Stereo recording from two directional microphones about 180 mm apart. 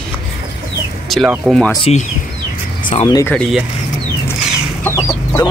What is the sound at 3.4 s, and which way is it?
Speech, centre (ahead or behind).